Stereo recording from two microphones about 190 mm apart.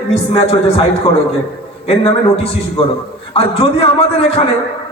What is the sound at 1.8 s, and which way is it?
A man's voice, 30° left (ahead or behind).